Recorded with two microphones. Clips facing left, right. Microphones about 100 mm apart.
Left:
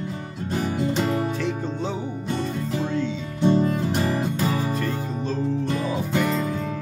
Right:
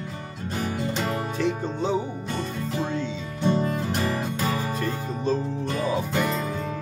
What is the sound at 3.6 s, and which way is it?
Music, 10° left (ahead or behind).